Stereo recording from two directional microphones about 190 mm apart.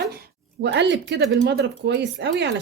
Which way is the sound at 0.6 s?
65° right (ahead or behind).